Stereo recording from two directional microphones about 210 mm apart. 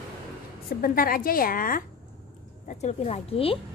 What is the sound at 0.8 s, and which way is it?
A woman's voice, 45° left (ahead or behind).